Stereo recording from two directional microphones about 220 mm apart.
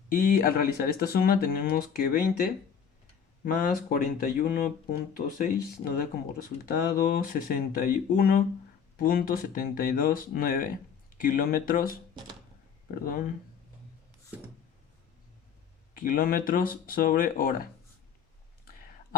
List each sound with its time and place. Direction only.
0.1 s speech: 40° left (ahead or behind)
3.4 s speech: 40° left (ahead or behind)
13.1 s speech: 40° left (ahead or behind)
16.0 s speech: 40° left (ahead or behind)